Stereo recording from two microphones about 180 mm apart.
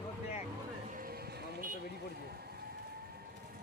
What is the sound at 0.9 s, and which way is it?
Vehicle, 50° right (ahead or behind).